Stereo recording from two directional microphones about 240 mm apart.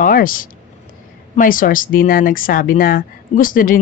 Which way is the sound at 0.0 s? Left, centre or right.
Left.